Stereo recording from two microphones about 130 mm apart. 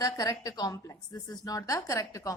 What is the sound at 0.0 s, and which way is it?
A woman's voice, 30° left (ahead or behind).